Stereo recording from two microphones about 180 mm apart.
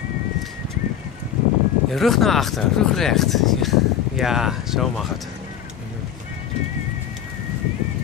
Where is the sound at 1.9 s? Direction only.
Centre (ahead or behind).